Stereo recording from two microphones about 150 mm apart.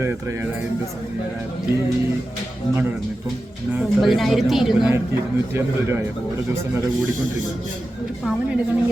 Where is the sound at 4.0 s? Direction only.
Centre (ahead or behind).